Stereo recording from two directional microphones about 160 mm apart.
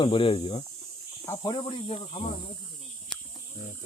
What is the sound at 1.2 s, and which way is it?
Speech, 25° left (ahead or behind).